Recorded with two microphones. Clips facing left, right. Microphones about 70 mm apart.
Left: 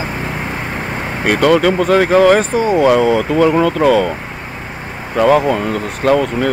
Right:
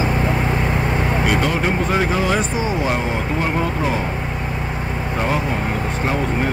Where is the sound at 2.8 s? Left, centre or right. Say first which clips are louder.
Left 10 dB; left.